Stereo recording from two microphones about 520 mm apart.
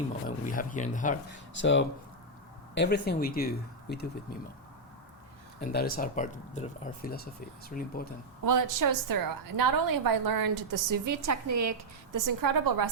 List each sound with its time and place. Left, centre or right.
0.3 s speech: centre
5.7 s speech: centre
8.4 s a woman's voice: right